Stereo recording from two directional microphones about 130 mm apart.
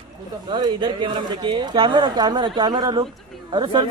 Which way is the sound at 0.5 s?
35° right (ahead or behind).